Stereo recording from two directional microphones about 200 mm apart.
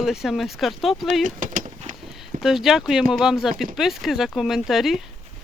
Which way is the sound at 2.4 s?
Centre (ahead or behind).